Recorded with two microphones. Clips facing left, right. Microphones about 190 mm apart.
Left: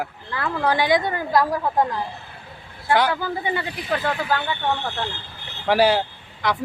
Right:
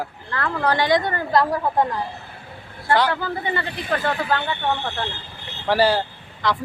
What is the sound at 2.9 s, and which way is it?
Speech, 15° left (ahead or behind).